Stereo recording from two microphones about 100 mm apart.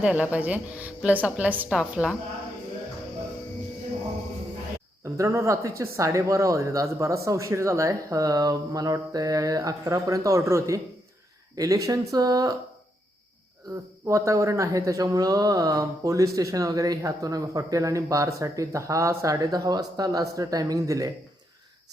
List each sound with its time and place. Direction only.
0.0 s a woman's voice: 15° right (ahead or behind)
5.1 s speech: 30° right (ahead or behind)
14.1 s speech: 30° right (ahead or behind)